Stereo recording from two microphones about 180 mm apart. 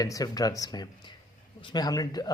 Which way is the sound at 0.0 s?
20° left (ahead or behind).